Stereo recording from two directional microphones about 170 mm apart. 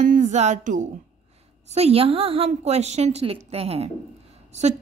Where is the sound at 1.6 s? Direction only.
40° right (ahead or behind).